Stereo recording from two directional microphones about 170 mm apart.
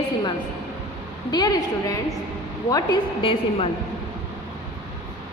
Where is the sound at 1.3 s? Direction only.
25° left (ahead or behind).